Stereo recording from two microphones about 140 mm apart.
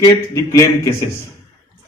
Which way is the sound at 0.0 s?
20° left (ahead or behind).